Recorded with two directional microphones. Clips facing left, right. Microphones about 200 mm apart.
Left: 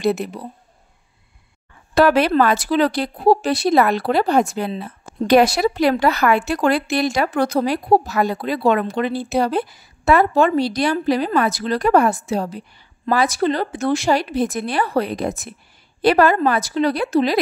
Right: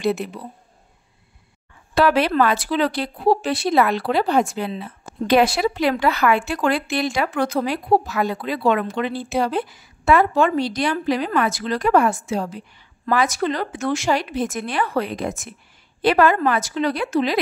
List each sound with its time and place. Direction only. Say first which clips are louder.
0.0 s speech: left 2 dB; 40° left (ahead or behind)
2.0 s speech: left 3 dB; 45° left (ahead or behind)